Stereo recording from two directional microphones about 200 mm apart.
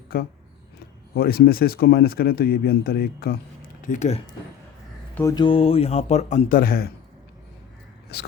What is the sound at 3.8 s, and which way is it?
Speech, 40° left (ahead or behind).